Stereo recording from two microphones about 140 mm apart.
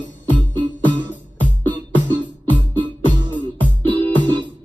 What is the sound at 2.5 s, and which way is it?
Music, 10° right (ahead or behind).